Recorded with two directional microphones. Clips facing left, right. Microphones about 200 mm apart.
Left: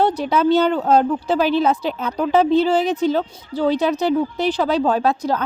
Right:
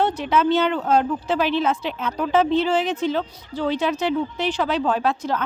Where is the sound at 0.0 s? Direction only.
35° left (ahead or behind).